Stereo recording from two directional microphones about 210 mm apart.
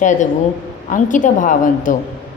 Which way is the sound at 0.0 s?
35° left (ahead or behind).